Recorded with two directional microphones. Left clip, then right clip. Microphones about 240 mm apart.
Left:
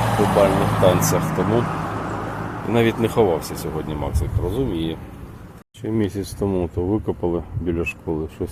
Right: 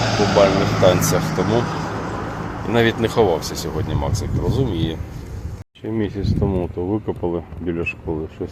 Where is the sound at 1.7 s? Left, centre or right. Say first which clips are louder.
Even; right.